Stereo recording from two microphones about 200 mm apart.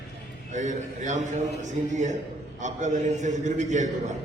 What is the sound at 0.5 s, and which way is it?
A man's voice, 40° right (ahead or behind).